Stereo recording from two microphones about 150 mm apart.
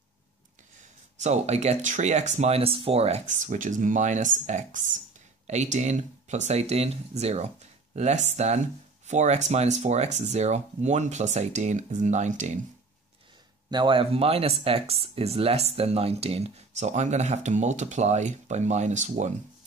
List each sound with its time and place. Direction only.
1.1 s speech: 50° right (ahead or behind)
13.7 s speech: 30° right (ahead or behind); by 19.3 s 50° right (ahead or behind)